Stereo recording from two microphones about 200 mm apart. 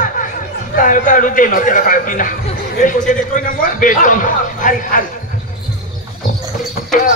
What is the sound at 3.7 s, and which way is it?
A man's voice, 40° left (ahead or behind).